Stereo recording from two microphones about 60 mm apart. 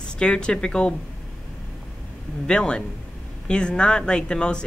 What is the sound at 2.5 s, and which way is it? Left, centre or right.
A woman's voice, centre.